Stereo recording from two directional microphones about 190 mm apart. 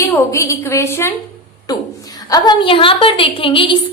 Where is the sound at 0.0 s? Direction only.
15° left (ahead or behind).